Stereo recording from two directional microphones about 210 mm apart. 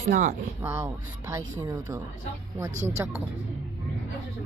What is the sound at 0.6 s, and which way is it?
Speech, 15° right (ahead or behind).